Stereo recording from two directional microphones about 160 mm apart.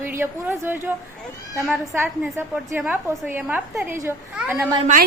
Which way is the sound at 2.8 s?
10° right (ahead or behind).